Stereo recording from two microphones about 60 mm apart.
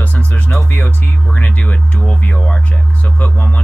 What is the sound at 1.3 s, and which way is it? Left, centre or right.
Speech, left.